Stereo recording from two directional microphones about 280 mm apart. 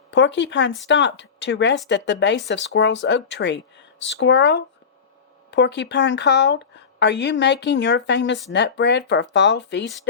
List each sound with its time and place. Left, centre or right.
0.1 s a woman's voice: left